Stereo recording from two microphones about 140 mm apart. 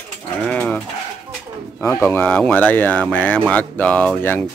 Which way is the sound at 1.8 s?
15° left (ahead or behind).